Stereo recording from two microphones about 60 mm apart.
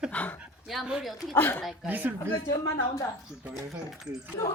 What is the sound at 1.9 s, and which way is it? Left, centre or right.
Speech, right.